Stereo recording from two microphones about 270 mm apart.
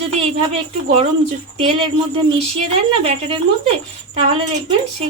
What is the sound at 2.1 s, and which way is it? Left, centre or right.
Speech, right.